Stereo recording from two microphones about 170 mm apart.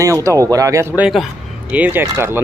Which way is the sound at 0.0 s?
20° right (ahead or behind).